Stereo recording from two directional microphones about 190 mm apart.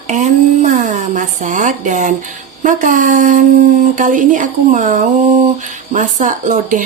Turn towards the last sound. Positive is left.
turn(degrees=-45)  # may be behind; listen again after turning